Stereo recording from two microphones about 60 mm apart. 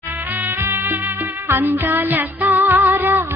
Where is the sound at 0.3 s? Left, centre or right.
Right.